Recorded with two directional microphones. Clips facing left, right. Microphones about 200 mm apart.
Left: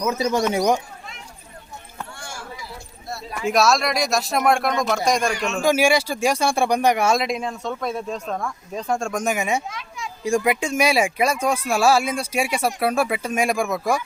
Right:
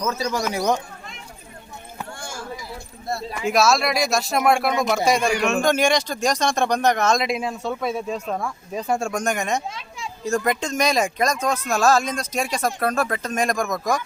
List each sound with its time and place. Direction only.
0.0 s speech: 20° left (ahead or behind)
3.4 s speech: centre (ahead or behind)
5.5 s speech: 5° left (ahead or behind)
7.3 s speech: 5° right (ahead or behind)
9.6 s children playing: 30° right (ahead or behind)
10.2 s speech: 10° left (ahead or behind)